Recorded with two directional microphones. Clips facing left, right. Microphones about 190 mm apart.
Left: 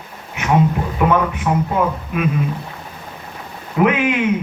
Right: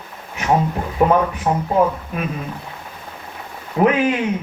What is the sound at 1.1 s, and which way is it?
A man's voice, 35° right (ahead or behind).